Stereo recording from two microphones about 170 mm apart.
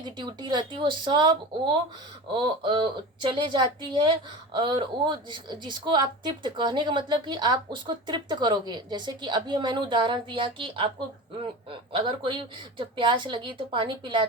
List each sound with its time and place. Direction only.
0.0 s a woman's voice: 25° right (ahead or behind)